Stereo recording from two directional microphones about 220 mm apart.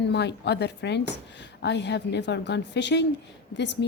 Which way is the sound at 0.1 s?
50° left (ahead or behind).